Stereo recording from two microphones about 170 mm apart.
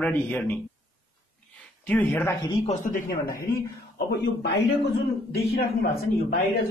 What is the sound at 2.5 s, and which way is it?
Speech, 40° left (ahead or behind).